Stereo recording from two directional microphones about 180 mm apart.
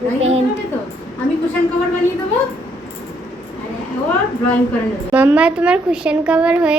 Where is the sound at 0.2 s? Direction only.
35° right (ahead or behind).